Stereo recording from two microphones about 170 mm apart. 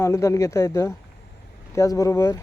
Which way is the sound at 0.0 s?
20° left (ahead or behind).